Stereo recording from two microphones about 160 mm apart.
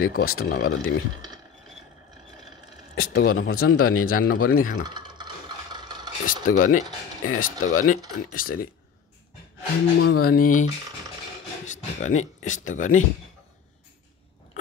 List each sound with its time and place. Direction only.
0.0 s speech: 70° left (ahead or behind); by 0.9 s 90° left
3.0 s speech: 75° left (ahead or behind)
4.8 s a sound: 25° right (ahead or behind)
6.2 s speech: 55° left (ahead or behind)
8.4 s speech: 65° left (ahead or behind)
9.9 s speech: 75° left (ahead or behind); by 13.0 s 55° left (ahead or behind)